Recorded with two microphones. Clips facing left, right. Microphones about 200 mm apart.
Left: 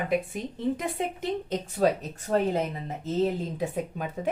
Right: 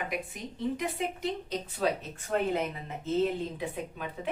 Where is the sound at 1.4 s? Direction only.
45° left (ahead or behind).